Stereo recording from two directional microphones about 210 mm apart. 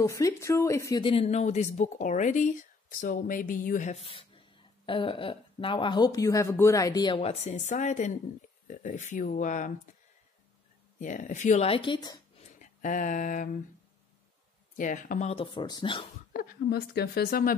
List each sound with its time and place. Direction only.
0.0 s speech: 15° left (ahead or behind); by 9.7 s 35° left (ahead or behind)
11.0 s speech: 35° left (ahead or behind); by 12.2 s 20° left (ahead or behind)
12.5 s speech: 35° left (ahead or behind)
14.8 s speech: 40° left (ahead or behind); by 16.1 s 25° left (ahead or behind)
16.3 s a woman's voice: 45° left (ahead or behind)